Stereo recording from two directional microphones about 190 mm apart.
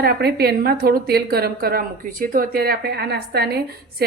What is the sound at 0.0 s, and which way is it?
A woman's voice, 55° right (ahead or behind).